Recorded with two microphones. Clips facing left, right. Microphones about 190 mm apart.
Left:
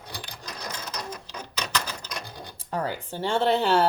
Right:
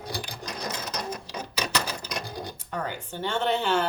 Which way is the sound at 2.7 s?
35° left (ahead or behind).